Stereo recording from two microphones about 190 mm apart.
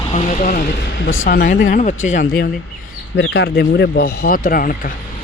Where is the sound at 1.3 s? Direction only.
45° left (ahead or behind).